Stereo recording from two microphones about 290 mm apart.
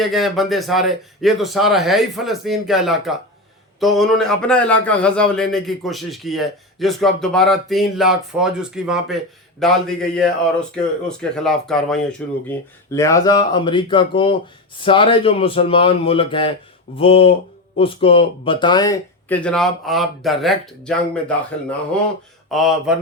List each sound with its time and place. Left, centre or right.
0.0 s a man's voice: centre